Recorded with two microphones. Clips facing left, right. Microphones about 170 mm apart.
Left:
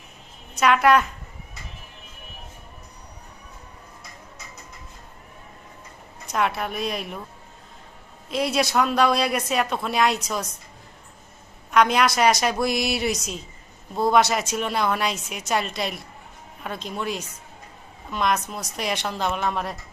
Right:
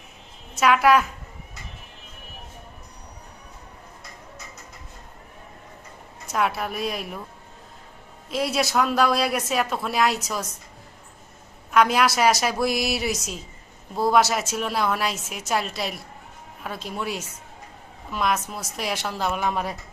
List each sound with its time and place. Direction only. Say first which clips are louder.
0.5 s a woman's voice: even; 5° right (ahead or behind)
6.2 s a woman's voice: even; centre (ahead or behind)
8.3 s a woman's voice: left 1 dB; centre (ahead or behind)
11.7 s a woman's voice: even; 5° right (ahead or behind)